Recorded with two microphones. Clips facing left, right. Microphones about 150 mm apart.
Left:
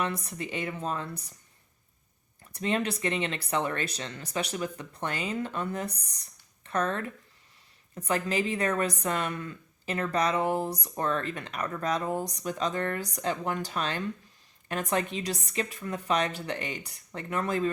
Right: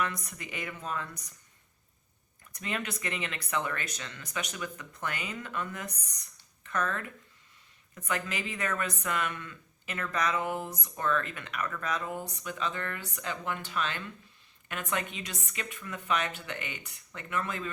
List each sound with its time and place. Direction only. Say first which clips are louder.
0.0 s a woman's voice: left 3 dB; 30° left (ahead or behind)
2.4 s a woman's voice: left 7 dB; 30° left (ahead or behind)